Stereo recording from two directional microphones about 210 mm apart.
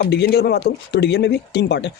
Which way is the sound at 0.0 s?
50° left (ahead or behind).